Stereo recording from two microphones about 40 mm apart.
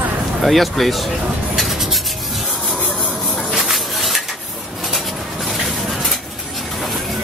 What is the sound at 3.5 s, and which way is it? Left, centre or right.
Music, centre.